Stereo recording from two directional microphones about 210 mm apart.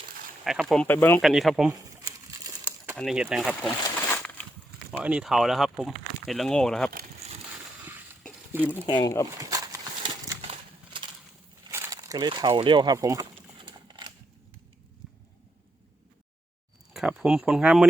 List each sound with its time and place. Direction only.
0.4 s speech: centre (ahead or behind)
1.2 s speech: centre (ahead or behind)
1.7 s crumpling: 15° right (ahead or behind)
2.9 s speech: centre (ahead or behind)
3.8 s a sound: 10° left (ahead or behind)
4.9 s speech: 5° right (ahead or behind)
7.2 s crushing: 30° right (ahead or behind)
8.9 s speech: 20° left (ahead or behind)
9.4 s horse: 15° right (ahead or behind)
10.4 s a sound: 25° right (ahead or behind)
11.7 s a sound: 15° right (ahead or behind)
16.9 s speech: centre (ahead or behind)